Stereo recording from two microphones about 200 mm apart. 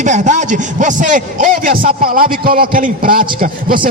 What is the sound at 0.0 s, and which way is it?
A man's voice, 40° right (ahead or behind).